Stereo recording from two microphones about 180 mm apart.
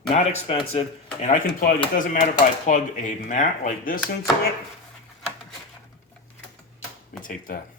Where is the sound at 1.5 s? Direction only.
50° left (ahead or behind).